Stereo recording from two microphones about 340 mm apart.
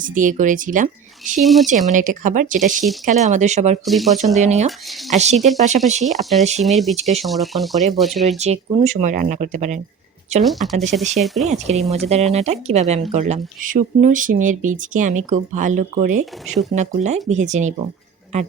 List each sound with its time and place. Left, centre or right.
0.0 s speech: right
1.4 s speech: centre
1.9 s speech: right
3.8 s speech: centre
4.4 s speech: centre
5.4 s speech: centre
6.9 s speech: centre
7.3 s speech: centre
8.4 s speech: centre
10.4 s speech: centre
11.4 s speech: centre